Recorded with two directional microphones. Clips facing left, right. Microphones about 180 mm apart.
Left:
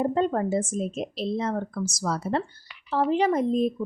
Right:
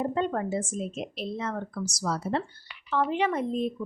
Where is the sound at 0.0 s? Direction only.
35° left (ahead or behind).